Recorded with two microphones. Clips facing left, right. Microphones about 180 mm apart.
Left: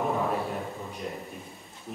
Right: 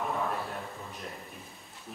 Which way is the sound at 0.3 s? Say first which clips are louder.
Left 6 dB; centre (ahead or behind).